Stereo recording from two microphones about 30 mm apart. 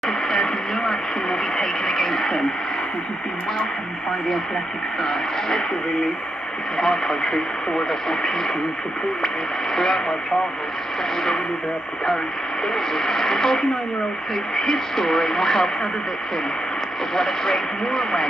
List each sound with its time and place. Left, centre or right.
0.3 s radio: centre
6.8 s speech: centre
9.8 s speech: centre
12.6 s speech: centre
17.1 s speech: centre